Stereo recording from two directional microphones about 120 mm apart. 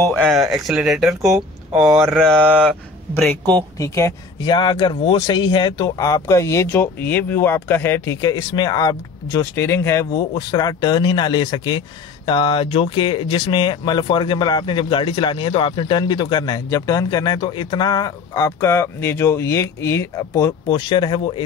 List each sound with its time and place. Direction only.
0.0 s speech: 10° left (ahead or behind)
2.5 s speech: 5° right (ahead or behind)
3.7 s speech: 25° left (ahead or behind)
4.5 s speech: 40° left (ahead or behind); by 10.2 s 25° left (ahead or behind)
10.3 s speech: 35° left (ahead or behind)